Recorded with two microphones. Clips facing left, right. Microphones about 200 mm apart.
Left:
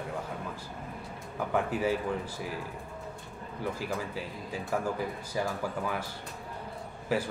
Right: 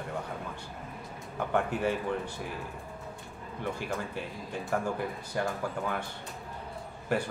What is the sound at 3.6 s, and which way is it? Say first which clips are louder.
Speech: even; 5° left (ahead or behind).